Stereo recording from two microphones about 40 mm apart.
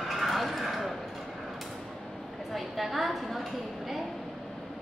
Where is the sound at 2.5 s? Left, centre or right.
Centre.